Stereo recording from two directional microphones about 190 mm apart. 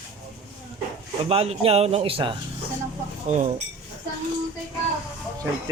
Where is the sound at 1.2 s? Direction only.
30° right (ahead or behind).